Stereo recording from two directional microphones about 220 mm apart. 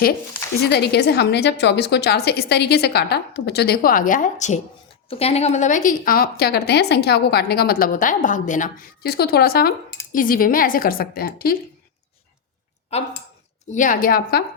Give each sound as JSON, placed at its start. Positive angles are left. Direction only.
{"t": 0.7, "sound": "a woman's voice", "side_deg": 50}
{"t": 13.7, "sound": "a woman's voice", "side_deg": 35}